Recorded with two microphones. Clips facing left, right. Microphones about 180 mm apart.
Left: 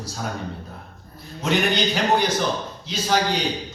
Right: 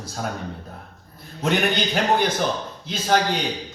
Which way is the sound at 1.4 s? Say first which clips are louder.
Even; 55° right (ahead or behind).